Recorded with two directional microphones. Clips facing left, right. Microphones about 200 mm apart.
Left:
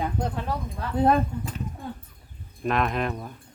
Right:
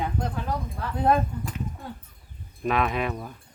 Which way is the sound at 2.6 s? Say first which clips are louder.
Even; centre (ahead or behind).